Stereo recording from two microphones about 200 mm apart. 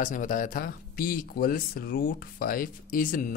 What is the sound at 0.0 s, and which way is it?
Speech, 40° left (ahead or behind).